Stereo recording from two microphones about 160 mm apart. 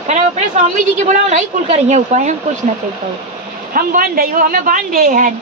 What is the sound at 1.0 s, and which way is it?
A woman's voice, 45° right (ahead or behind).